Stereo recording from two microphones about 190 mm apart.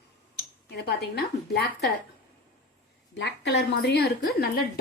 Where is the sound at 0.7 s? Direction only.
60° left (ahead or behind).